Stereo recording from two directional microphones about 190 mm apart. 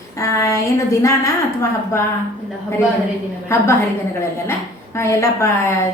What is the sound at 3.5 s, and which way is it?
Speech, 15° left (ahead or behind).